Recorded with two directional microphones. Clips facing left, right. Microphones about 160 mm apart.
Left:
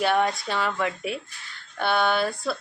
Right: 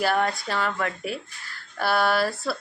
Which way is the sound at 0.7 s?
10° left (ahead or behind).